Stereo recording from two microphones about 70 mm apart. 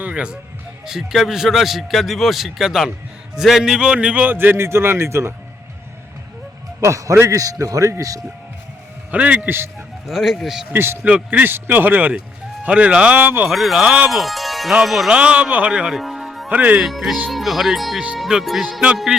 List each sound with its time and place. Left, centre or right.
0.0 s a man's voice: centre; by 5.3 s right
6.7 s a man's voice: right
9.1 s a man's voice: right
10.1 s speech: centre
10.7 s a man's voice: right
11.0 s a man's voice: centre
13.5 s speech: centre
15.1 s speech: centre
16.5 s a man's voice: right
16.8 s speech: centre